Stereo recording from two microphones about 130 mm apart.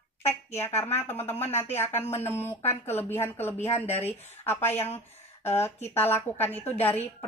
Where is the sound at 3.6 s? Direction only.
55° left (ahead or behind).